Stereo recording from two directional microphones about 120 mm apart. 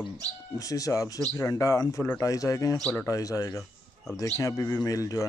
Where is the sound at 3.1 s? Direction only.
30° left (ahead or behind).